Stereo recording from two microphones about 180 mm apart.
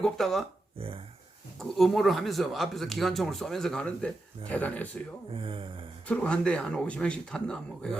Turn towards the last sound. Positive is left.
turn(degrees=5)  # may be behind; listen again after turning